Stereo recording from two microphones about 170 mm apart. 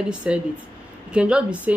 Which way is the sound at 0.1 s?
5° right (ahead or behind).